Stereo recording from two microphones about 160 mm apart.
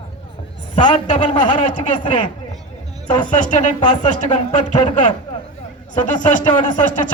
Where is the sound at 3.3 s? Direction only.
50° left (ahead or behind); by 4.9 s 35° left (ahead or behind).